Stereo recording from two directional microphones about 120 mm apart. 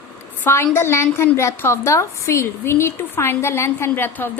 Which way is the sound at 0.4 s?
20° left (ahead or behind).